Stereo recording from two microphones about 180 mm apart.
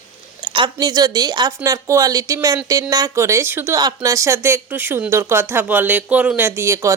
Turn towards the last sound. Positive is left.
turn(degrees=-15)  # may be behind; listen again after turning